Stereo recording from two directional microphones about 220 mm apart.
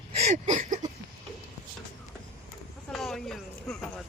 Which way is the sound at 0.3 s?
35° right (ahead or behind).